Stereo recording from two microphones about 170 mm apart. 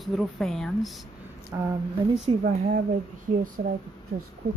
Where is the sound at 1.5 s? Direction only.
15° right (ahead or behind).